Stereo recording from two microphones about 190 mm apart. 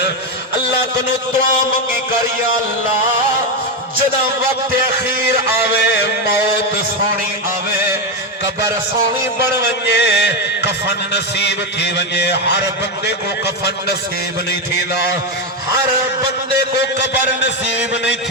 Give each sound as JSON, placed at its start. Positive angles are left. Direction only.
{"t": 5.2, "sound": "a man's voice", "side_deg": 60}
{"t": 7.7, "sound": "music", "side_deg": -10}
{"t": 9.8, "sound": "a man's voice", "side_deg": 60}
{"t": 16.5, "sound": "a man's voice", "side_deg": 65}